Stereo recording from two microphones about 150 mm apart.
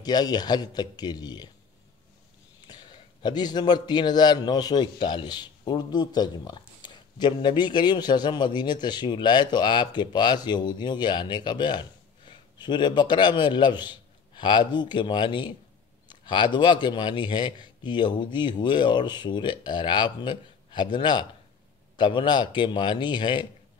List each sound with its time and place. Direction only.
0.0 s a man's voice: 25° left (ahead or behind)
2.6 s a man's voice: 30° left (ahead or behind)